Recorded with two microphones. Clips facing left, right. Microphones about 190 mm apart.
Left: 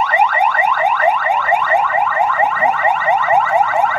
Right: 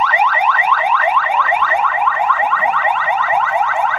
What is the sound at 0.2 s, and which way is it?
Car alarm, 45° left (ahead or behind).